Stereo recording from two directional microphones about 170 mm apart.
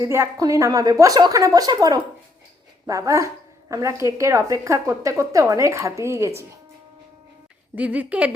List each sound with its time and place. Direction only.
0.0 s a woman's voice: 15° right (ahead or behind)
7.8 s a woman's voice: 10° right (ahead or behind)